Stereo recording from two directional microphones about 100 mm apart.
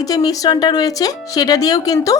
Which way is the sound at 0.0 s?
40° left (ahead or behind).